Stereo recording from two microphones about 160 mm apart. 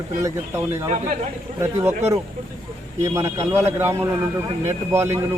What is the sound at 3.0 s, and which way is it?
A man's voice, 20° right (ahead or behind).